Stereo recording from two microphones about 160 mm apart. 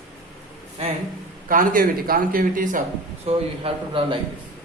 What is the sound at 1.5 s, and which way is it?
A man's voice, 60° right (ahead or behind).